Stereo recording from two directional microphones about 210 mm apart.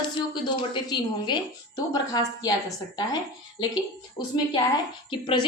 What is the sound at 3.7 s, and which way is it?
A woman's voice, 20° left (ahead or behind).